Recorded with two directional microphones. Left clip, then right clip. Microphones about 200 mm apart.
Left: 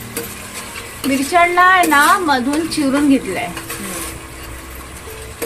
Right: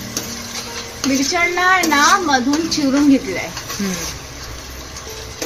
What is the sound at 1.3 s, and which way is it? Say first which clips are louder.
A woman's voice: left 5 dB; 15° left (ahead or behind).